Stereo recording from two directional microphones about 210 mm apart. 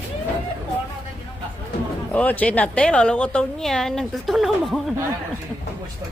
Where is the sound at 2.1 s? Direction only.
5° left (ahead or behind).